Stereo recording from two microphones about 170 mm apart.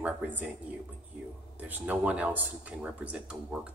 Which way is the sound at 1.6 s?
10° right (ahead or behind).